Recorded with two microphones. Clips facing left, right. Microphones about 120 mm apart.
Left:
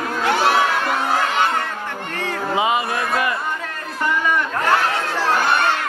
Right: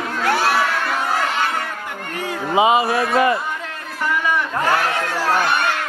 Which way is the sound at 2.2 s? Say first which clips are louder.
Right 4 dB; 15° right (ahead or behind).